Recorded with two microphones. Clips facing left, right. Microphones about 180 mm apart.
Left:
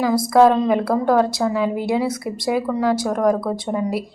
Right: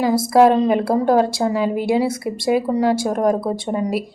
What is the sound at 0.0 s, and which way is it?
A woman's voice, 25° right (ahead or behind).